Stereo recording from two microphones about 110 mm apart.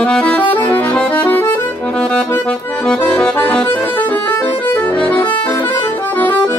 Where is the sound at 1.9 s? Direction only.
5° left (ahead or behind).